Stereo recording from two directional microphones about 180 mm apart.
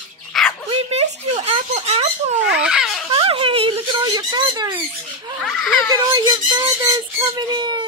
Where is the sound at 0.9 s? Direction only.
35° right (ahead or behind).